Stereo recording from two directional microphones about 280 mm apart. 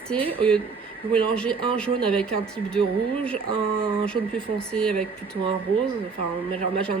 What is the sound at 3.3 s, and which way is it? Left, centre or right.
Speech, centre.